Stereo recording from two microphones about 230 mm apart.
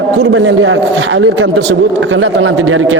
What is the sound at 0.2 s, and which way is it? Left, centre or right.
A man's voice, right.